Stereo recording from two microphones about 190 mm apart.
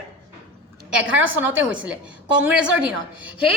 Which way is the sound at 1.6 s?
5° right (ahead or behind).